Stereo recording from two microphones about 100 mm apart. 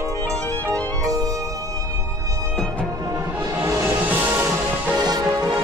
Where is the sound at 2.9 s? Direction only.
35° right (ahead or behind).